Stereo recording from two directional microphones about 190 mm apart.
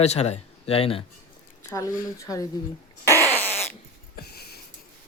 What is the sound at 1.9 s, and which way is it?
Speech, 45° left (ahead or behind).